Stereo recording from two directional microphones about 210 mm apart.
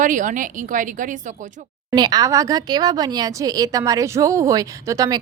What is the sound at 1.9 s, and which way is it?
Speech, 20° right (ahead or behind).